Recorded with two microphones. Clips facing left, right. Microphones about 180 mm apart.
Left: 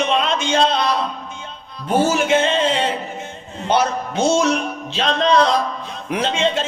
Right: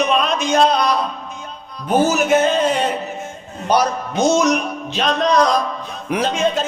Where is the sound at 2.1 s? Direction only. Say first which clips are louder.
Right 2 dB; 25° left (ahead or behind).